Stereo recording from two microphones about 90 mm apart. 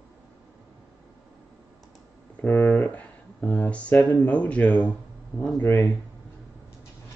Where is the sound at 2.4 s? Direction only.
20° left (ahead or behind).